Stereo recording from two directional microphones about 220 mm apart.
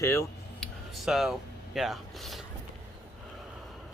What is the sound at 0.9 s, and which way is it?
Speech, centre (ahead or behind).